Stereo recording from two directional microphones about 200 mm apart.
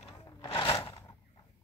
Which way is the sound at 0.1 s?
20° left (ahead or behind).